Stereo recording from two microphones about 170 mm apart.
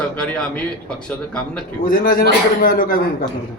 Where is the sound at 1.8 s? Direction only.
55° left (ahead or behind).